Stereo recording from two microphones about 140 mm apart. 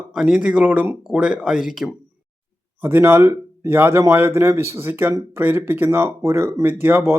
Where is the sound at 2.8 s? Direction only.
15° right (ahead or behind).